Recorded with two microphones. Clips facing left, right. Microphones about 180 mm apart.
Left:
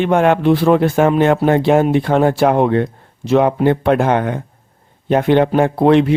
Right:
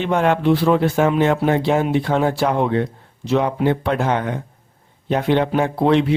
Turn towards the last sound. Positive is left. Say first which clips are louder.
# left 4 dB
turn(degrees=55)  # may be behind; listen again after turning